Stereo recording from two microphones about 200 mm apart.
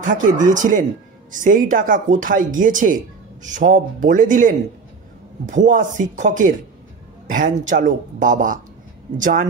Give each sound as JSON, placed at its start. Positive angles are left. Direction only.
{"t": 0.0, "sound": "speech", "side_deg": -40}
{"t": 5.7, "sound": "speech", "side_deg": -40}